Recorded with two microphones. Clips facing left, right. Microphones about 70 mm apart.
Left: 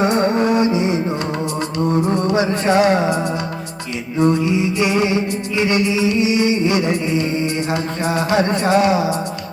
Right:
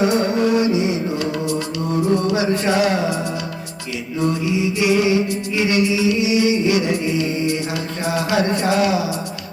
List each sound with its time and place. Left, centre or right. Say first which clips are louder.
0.0 s music: left 1 dB; left
4.2 s music: left 4 dB; left